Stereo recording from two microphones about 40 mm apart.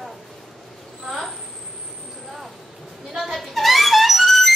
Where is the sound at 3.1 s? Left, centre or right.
Centre.